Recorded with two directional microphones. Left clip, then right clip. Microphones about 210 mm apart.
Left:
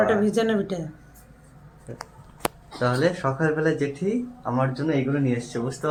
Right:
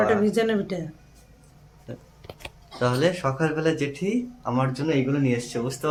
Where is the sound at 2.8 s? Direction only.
10° right (ahead or behind).